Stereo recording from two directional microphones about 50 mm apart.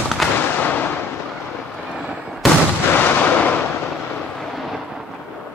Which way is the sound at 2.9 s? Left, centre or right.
Left.